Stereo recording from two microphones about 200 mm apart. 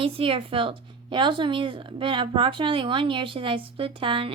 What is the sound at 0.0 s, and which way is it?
Speech, 30° right (ahead or behind).